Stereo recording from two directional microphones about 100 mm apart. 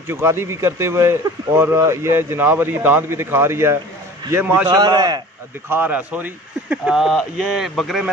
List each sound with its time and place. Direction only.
0.1 s a man's voice: 25° right (ahead or behind)
4.6 s a man's voice: 40° right (ahead or behind)
5.7 s speech: 20° right (ahead or behind)
7.0 s speech: 5° right (ahead or behind)